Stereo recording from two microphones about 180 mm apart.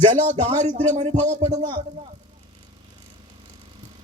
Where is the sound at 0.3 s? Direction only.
40° right (ahead or behind).